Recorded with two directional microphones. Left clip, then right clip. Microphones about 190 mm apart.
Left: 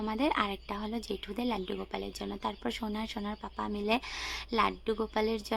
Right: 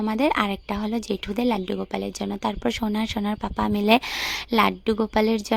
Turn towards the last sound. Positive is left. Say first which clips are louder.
# right 9 dB
turn(degrees=-40)  # may be behind; listen again after turning